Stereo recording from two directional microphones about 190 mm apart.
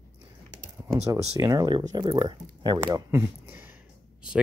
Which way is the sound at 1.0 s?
20° right (ahead or behind).